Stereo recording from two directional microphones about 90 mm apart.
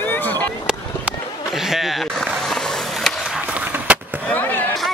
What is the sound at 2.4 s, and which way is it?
Skateboard, 5° left (ahead or behind).